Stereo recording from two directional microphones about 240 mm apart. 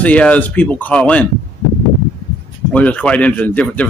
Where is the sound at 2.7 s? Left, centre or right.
Centre.